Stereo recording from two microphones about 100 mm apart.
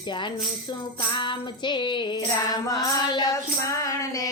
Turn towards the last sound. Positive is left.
turn(degrees=35)  # may be behind; listen again after turning